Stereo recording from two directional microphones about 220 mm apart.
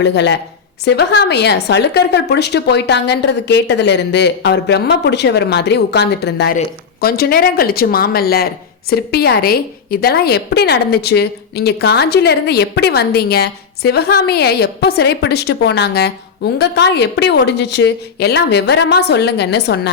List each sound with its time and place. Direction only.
0.0 s speech: 50° left (ahead or behind)